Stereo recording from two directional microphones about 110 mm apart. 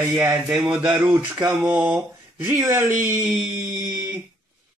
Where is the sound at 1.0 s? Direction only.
25° right (ahead or behind).